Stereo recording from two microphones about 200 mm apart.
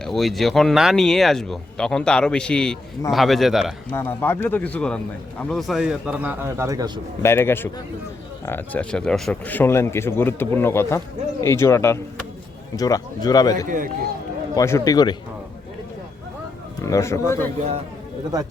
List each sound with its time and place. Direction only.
0.0 s speech: centre (ahead or behind)
3.9 s speech: 10° left (ahead or behind); by 7.0 s 20° right (ahead or behind)
7.2 s a man's voice: 10° left (ahead or behind)
13.7 s speech: 45° right (ahead or behind)
14.5 s speech: 15° left (ahead or behind)
16.8 s speech: 15° left (ahead or behind)